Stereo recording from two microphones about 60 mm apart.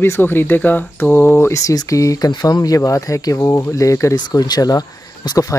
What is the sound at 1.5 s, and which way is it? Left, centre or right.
Speech, left.